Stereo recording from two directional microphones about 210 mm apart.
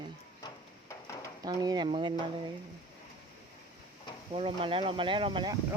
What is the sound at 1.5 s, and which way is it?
Speech, 20° right (ahead or behind).